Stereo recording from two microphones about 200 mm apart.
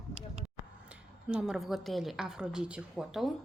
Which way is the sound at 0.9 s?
5° right (ahead or behind).